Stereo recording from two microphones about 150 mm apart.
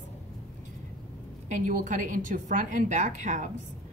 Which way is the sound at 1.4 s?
55° right (ahead or behind).